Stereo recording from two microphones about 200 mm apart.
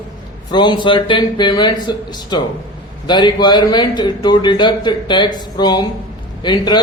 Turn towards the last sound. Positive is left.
turn(degrees=20)  # may be behind; listen again after turning